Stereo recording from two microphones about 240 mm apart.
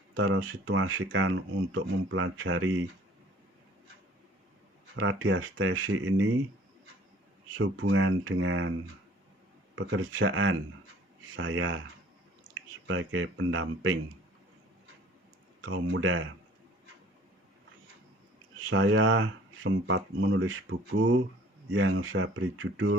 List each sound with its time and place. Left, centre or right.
0.2 s speech: right
4.9 s speech: right
7.5 s speech: right
9.7 s speech: right
12.9 s speech: right
15.6 s speech: right
18.7 s speech: right